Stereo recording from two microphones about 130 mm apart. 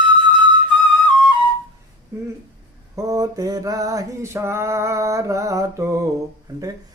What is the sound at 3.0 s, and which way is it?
Male singing, 25° right (ahead or behind).